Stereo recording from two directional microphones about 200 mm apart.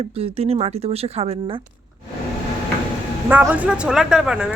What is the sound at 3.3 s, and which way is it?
Speech, 10° right (ahead or behind).